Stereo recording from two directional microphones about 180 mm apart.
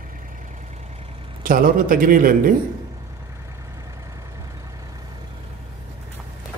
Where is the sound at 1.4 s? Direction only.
50° right (ahead or behind).